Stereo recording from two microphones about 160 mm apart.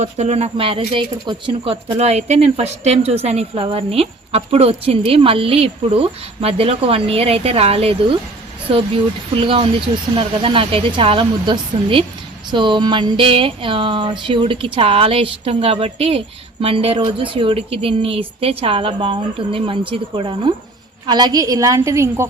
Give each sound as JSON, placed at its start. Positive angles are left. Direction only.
{"t": 0.0, "sound": "speech", "side_deg": -45}
{"t": 9.4, "sound": "a woman's voice", "side_deg": -35}